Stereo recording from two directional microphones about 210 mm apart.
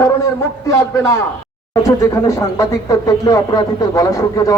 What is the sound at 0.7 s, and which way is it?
A man's voice, 15° left (ahead or behind).